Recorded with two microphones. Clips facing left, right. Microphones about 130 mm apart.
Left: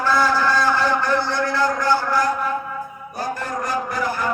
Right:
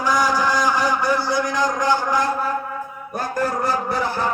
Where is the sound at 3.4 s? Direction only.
30° right (ahead or behind).